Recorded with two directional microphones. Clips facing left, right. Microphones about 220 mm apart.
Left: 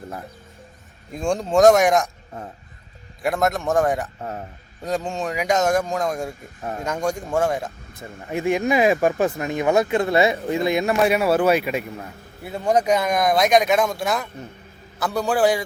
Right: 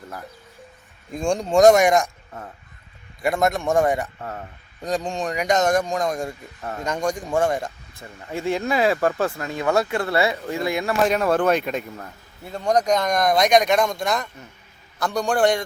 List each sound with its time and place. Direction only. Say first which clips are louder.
1.1 s speech: even; 5° left (ahead or behind)
3.2 s speech: even; centre (ahead or behind)
4.2 s speech: left 2 dB; 20° left (ahead or behind)
4.8 s speech: even; 5° left (ahead or behind)
6.6 s speech: left 2 dB; 15° left (ahead or behind)
6.8 s speech: even; 5° left (ahead or behind)
7.9 s speech: left 4 dB; 15° left (ahead or behind)
11.0 s speech: even; 10° left (ahead or behind)